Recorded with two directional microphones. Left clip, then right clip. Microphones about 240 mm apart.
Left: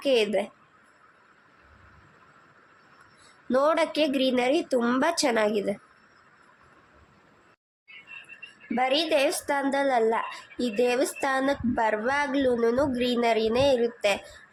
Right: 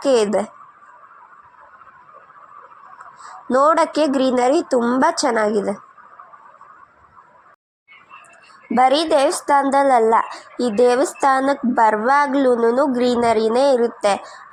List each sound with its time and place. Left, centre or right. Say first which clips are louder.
0.0 s speech: right 7 dB; centre
3.5 s speech: right 8 dB; centre
8.7 s speech: right 9 dB; centre